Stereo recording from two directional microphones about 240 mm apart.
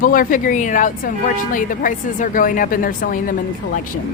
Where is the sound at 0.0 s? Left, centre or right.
Left.